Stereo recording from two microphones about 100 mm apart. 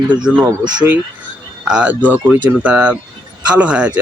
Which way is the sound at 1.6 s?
5° right (ahead or behind).